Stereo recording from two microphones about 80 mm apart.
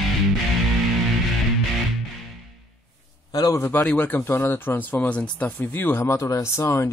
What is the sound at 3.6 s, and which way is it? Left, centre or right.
Speech, left.